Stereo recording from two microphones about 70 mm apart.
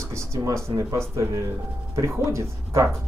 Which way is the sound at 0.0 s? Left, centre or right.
Right.